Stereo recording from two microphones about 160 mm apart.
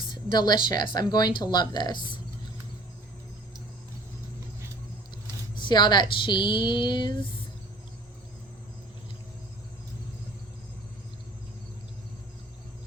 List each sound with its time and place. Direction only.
0.1 s a woman's voice: 25° left (ahead or behind)
5.5 s speech: 25° left (ahead or behind)